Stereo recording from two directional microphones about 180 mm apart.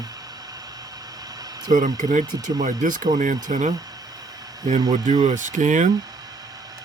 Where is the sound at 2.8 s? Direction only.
45° right (ahead or behind).